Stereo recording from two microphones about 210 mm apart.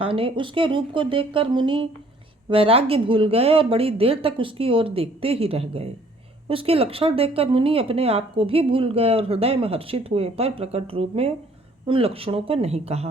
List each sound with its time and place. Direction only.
0.0 s speech: 25° right (ahead or behind)